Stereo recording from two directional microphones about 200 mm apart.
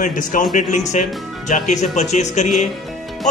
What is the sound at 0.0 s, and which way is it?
Speech, 40° left (ahead or behind).